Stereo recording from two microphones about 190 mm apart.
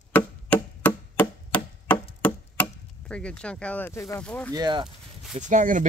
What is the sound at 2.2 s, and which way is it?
Chop, 5° left (ahead or behind).